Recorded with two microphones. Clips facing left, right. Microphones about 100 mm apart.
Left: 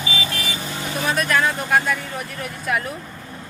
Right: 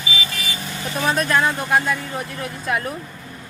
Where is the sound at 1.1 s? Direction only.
30° right (ahead or behind).